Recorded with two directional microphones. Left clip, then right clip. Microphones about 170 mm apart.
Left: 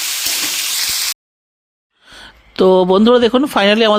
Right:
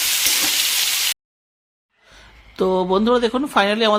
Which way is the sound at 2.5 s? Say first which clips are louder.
Left 8 dB; 40° left (ahead or behind).